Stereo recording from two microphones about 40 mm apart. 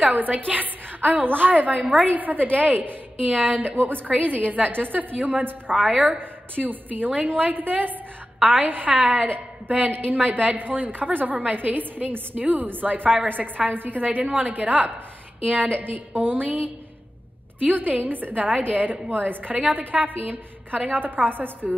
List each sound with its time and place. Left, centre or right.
0.0 s a woman's voice: right
5.1 s a woman's voice: right
5.9 s a woman's voice: centre
6.1 s a woman's voice: right